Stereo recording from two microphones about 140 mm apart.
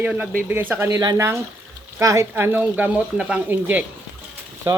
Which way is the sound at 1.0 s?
30° right (ahead or behind).